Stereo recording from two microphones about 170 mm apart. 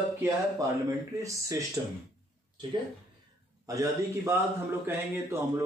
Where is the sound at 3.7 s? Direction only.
15° right (ahead or behind).